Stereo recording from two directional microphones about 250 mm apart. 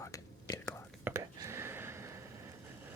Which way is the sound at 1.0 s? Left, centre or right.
Centre.